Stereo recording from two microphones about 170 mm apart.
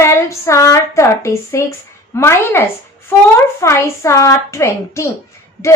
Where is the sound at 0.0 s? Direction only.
15° left (ahead or behind).